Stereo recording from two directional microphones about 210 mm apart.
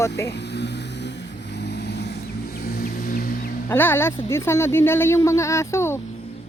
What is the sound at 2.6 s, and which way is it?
Music, 50° left (ahead or behind).